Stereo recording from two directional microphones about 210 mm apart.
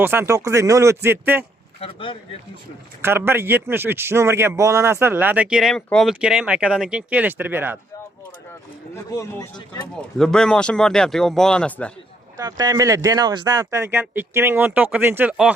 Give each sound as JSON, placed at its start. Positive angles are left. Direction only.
{"t": 0.0, "sound": "a man's voice", "side_deg": -10}
{"t": 1.8, "sound": "speech", "side_deg": 25}
{"t": 3.0, "sound": "a man's voice", "side_deg": -10}
{"t": 9.0, "sound": "speech", "side_deg": 15}
{"t": 10.2, "sound": "speech", "side_deg": 5}
{"t": 12.4, "sound": "a man's voice", "side_deg": -20}